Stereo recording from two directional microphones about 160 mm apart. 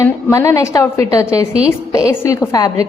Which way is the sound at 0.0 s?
15° left (ahead or behind).